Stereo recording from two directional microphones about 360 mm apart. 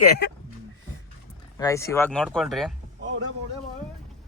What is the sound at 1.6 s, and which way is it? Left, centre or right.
Speech, centre.